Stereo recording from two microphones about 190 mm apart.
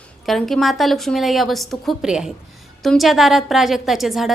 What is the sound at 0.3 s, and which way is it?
A woman's voice, centre (ahead or behind).